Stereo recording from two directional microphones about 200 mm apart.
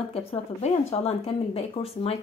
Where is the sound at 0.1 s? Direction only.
30° left (ahead or behind).